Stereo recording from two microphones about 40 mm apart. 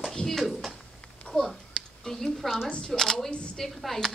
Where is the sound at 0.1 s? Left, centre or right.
Centre.